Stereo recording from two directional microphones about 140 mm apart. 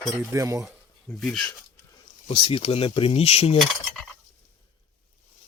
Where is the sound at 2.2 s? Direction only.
35° left (ahead or behind).